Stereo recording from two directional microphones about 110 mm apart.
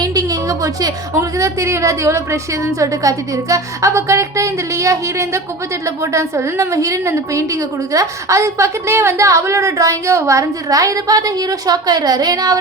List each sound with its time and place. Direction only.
0.0 s a woman's voice: 35° right (ahead or behind)